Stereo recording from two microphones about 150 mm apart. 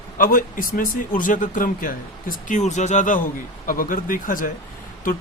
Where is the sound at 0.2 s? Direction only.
65° left (ahead or behind).